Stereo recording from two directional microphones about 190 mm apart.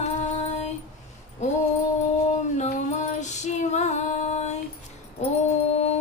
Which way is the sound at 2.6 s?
40° left (ahead or behind).